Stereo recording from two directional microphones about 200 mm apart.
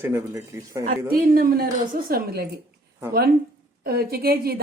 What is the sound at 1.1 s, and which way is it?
A woman's voice, 50° right (ahead or behind).